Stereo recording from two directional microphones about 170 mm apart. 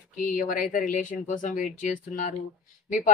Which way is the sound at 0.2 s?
50° left (ahead or behind).